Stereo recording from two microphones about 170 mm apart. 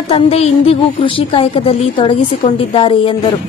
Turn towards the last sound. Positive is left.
turn(degrees=30)  # may be behind; listen again after turning